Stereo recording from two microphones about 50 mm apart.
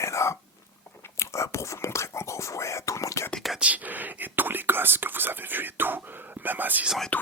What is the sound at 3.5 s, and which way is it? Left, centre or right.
Whispering, right.